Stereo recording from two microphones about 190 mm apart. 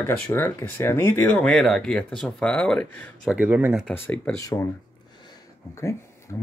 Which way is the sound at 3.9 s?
10° left (ahead or behind).